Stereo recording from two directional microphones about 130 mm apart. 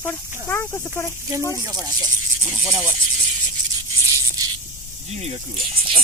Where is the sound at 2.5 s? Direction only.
5° right (ahead or behind).